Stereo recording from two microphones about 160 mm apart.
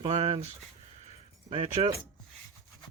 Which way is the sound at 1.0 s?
35° right (ahead or behind).